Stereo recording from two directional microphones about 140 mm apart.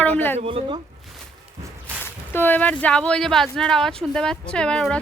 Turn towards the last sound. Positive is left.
turn(degrees=5)  # may be behind; listen again after turning